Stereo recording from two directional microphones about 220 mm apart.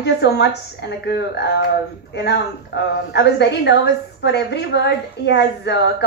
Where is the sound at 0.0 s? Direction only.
50° left (ahead or behind).